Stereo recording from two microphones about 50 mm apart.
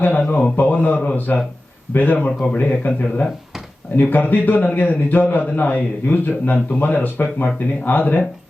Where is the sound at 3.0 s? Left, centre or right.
Left.